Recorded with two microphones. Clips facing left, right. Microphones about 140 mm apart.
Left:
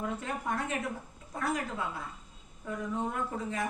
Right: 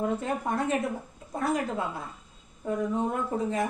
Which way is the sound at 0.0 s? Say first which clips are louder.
Right 6 dB; 30° right (ahead or behind).